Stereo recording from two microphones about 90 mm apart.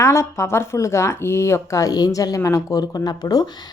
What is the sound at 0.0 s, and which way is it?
A woman's voice, 30° left (ahead or behind).